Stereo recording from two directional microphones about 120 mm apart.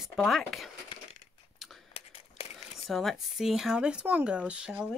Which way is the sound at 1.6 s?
Centre (ahead or behind).